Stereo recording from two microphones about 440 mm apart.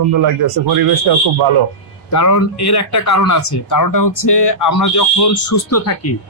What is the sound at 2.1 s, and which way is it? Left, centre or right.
Speech, left.